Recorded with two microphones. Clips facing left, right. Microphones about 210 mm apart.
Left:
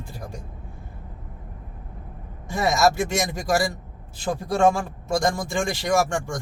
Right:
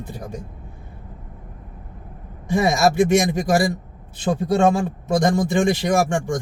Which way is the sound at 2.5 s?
15° right (ahead or behind).